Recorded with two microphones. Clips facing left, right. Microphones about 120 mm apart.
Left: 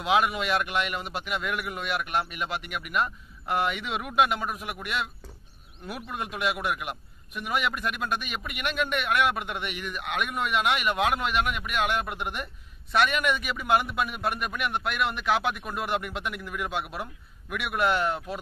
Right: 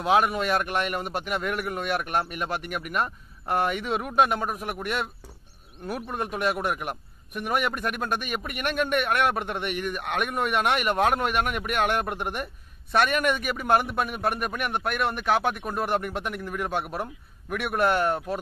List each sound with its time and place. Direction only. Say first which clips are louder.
0.0 s speech: right 2 dB; 40° right (ahead or behind)